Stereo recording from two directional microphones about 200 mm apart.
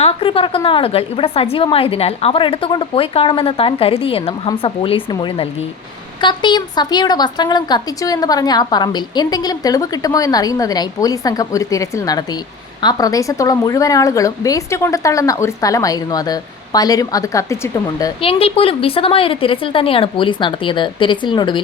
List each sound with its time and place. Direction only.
0.0 s a woman's voice: 30° left (ahead or behind)
18.2 s a woman's voice: 30° left (ahead or behind)